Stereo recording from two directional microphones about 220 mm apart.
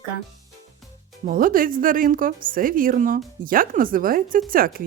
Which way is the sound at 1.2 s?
40° right (ahead or behind).